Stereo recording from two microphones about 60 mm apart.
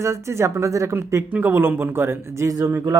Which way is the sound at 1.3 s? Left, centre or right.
Right.